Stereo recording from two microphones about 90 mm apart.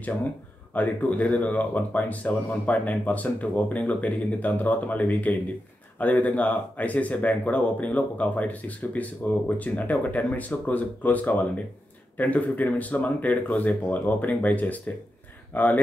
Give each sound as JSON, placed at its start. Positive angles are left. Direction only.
{"t": 0.7, "sound": "speech", "side_deg": 15}